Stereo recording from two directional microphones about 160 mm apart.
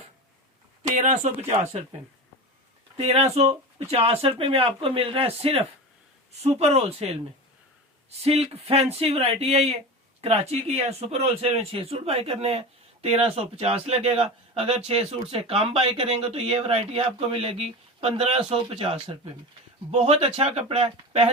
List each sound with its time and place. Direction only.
0.9 s speech: 50° right (ahead or behind)
3.0 s speech: 40° right (ahead or behind)
8.2 s speech: 40° right (ahead or behind)